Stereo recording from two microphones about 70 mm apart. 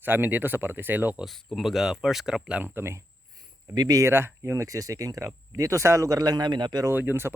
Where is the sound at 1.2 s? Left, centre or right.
Centre.